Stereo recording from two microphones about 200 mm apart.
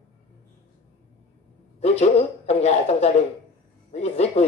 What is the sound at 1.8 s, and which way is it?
A man's voice, 30° left (ahead or behind).